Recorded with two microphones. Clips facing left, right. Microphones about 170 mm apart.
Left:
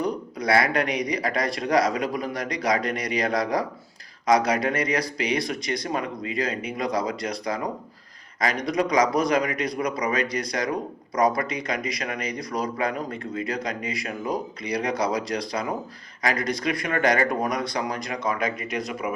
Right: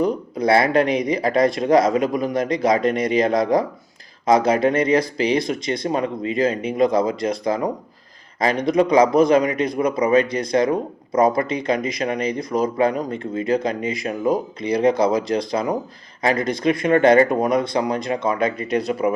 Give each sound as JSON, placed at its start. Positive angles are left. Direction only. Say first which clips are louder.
{"t": 0.0, "sound": "speech", "louder": "right 7 dB", "side_deg": -25}